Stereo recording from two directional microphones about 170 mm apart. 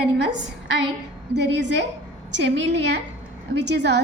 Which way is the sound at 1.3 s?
90° right.